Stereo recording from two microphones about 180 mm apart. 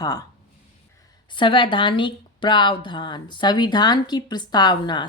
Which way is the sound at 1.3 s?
25° left (ahead or behind).